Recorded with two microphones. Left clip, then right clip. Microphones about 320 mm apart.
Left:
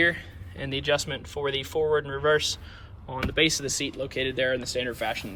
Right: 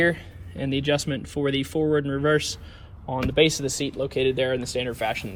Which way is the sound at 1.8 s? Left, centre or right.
Right.